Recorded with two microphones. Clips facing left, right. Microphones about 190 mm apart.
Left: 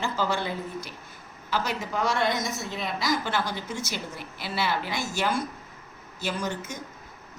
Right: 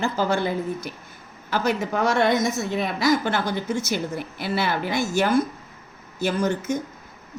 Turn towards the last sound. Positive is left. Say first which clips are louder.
# right 8 dB
turn(degrees=-50)  # may be behind; listen again after turning